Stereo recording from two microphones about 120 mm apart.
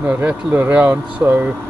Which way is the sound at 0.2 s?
15° right (ahead or behind).